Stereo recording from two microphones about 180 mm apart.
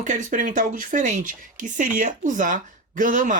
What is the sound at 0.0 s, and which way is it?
Speech, 45° right (ahead or behind).